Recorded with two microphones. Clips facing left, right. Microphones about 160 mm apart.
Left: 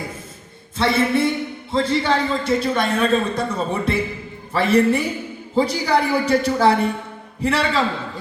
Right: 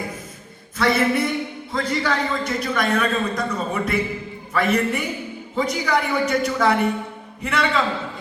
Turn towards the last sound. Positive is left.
turn(degrees=30)  # may be behind; listen again after turning